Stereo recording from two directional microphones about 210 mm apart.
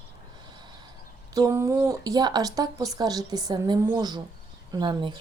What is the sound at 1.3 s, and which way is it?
A woman's voice, 15° right (ahead or behind).